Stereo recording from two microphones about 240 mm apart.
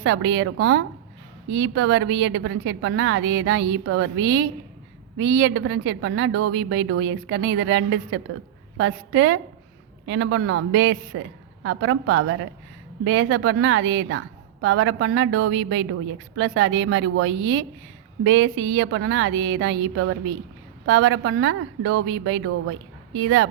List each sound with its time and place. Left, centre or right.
0.0 s a woman's voice: right